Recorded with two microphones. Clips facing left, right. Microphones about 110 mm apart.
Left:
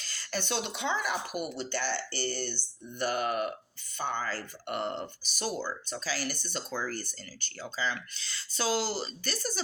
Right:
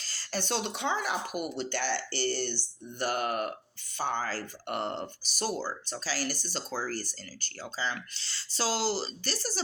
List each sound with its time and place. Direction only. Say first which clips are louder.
0.0 s speech: right 1 dB; 35° right (ahead or behind); by 2.0 s 55° right (ahead or behind)
2.3 s speech: right 3 dB; 45° left (ahead or behind)
3.0 s speech: even; 45° right (ahead or behind)